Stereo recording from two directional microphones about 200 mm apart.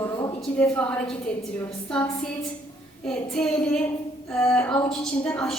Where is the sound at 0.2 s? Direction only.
20° left (ahead or behind).